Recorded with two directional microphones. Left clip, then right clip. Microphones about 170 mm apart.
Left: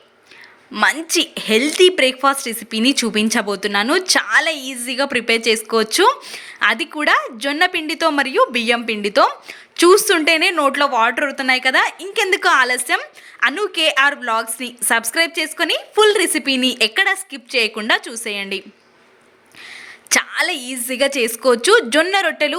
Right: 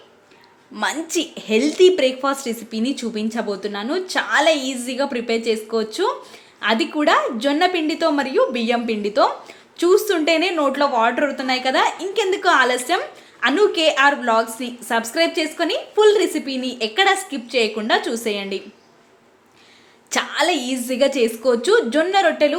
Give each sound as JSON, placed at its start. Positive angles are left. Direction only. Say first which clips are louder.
{"t": 0.7, "sound": "speech", "louder": "left 6 dB", "side_deg": 10}
{"t": 20.1, "sound": "speech", "louder": "left 1 dB", "side_deg": 20}